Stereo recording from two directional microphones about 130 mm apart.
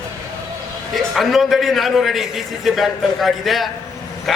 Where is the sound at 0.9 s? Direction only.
Centre (ahead or behind).